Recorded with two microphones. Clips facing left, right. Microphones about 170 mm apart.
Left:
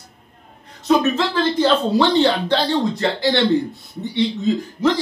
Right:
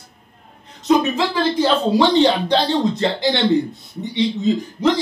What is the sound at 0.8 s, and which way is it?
Speech, 10° right (ahead or behind).